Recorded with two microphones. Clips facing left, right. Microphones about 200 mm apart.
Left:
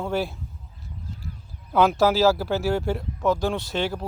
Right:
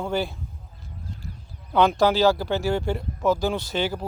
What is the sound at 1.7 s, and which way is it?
Speech, 5° left (ahead or behind).